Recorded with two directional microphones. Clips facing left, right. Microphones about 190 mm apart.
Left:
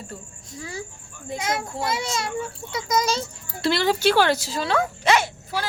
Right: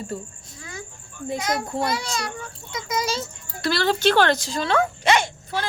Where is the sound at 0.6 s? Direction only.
30° left (ahead or behind).